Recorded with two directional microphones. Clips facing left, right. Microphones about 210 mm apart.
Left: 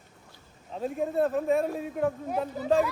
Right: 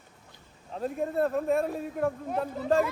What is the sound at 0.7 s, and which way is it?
A man's voice, centre (ahead or behind).